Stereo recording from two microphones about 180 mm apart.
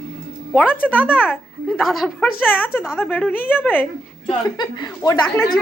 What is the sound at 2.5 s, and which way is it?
Speech, 10° left (ahead or behind).